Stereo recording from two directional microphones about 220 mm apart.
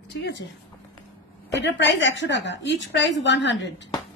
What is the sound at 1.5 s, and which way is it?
A woman's voice, 55° left (ahead or behind).